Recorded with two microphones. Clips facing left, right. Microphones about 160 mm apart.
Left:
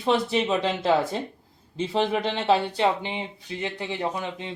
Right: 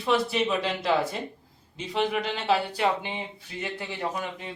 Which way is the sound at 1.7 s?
30° left (ahead or behind).